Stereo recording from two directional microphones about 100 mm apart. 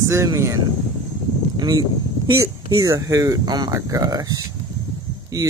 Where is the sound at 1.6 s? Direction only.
35° right (ahead or behind).